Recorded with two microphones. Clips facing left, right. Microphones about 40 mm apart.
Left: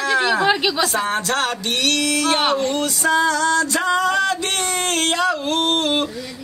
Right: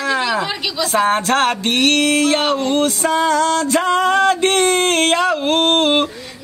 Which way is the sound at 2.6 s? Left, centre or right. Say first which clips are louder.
Right 3 dB; right.